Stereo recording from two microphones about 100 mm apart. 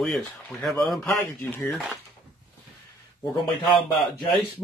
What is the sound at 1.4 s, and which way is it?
Speech, 25° left (ahead or behind).